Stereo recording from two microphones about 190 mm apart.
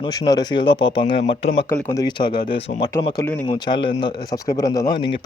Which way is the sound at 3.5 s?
25° left (ahead or behind).